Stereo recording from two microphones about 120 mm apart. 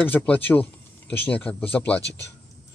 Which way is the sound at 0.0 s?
15° left (ahead or behind).